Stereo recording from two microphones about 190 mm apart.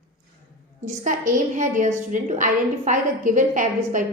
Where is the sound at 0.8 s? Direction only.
40° right (ahead or behind).